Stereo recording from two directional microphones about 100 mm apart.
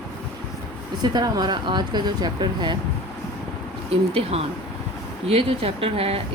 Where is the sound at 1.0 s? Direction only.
40° right (ahead or behind).